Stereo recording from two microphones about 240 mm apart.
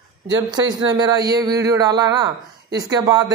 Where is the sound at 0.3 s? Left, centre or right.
Centre.